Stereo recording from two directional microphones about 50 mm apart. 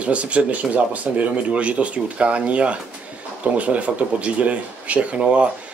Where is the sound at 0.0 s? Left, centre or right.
Right.